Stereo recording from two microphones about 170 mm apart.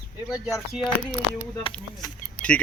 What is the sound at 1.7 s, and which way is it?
Speech, 30° left (ahead or behind).